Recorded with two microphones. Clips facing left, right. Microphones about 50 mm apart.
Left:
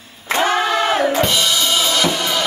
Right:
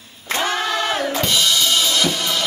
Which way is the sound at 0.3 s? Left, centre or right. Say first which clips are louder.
Left 4 dB; centre.